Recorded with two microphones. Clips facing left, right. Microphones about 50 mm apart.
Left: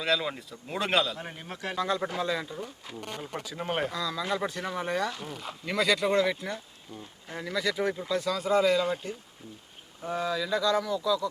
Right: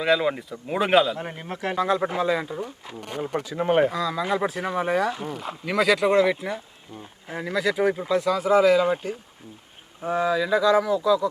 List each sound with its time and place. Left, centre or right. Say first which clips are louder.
0.0 s speech: right 7 dB; centre
1.2 s speech: right 6 dB; right
1.6 s speech: right 6 dB; centre